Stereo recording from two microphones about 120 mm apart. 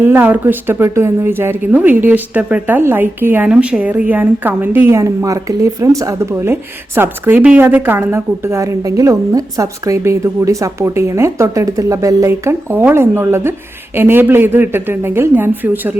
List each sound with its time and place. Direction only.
0.0 s speech: 15° right (ahead or behind)